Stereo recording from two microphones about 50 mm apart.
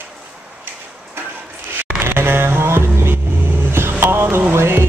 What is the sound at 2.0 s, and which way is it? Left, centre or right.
Vehicle, right.